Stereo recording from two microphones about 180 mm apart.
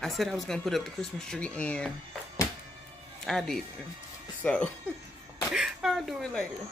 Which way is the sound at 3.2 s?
Centre (ahead or behind).